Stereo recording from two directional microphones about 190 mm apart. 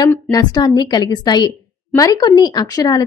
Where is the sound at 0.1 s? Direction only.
20° left (ahead or behind).